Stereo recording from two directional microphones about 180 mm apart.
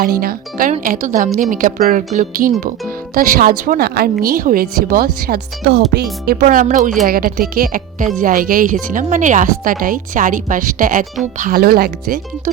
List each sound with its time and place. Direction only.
0.0 s speech: 55° right (ahead or behind)
5.6 s speech: 75° right (ahead or behind)
6.2 s speech: 55° right (ahead or behind)